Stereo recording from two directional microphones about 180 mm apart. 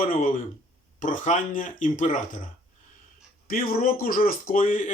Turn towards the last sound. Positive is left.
turn(degrees=45)  # may be behind; listen again after turning